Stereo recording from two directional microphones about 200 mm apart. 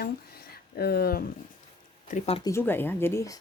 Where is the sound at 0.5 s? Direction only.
50° left (ahead or behind).